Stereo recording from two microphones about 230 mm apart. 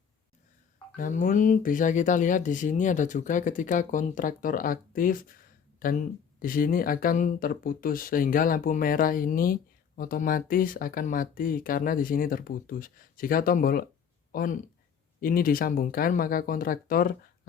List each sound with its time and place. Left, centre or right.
0.9 s speech: left